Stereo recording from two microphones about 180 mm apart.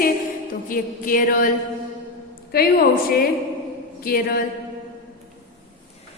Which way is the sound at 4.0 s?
55° left (ahead or behind).